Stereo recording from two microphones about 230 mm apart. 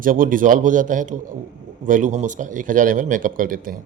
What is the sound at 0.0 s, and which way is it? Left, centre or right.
A man's voice, right.